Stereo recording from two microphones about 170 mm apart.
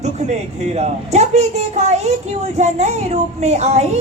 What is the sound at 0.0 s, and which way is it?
Speech, 40° right (ahead or behind).